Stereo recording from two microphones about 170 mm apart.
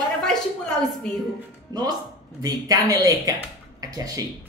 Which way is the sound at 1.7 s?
25° right (ahead or behind).